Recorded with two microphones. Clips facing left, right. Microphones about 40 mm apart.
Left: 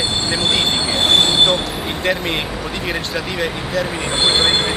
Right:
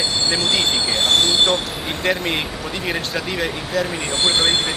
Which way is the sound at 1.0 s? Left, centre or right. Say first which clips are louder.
Left 3 dB; left.